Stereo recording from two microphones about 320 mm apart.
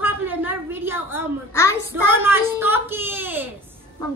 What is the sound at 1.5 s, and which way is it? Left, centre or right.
Speech, centre.